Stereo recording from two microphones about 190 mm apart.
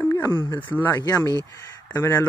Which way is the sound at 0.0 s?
15° left (ahead or behind).